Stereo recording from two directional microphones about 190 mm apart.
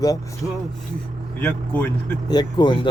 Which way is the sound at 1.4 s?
10° left (ahead or behind).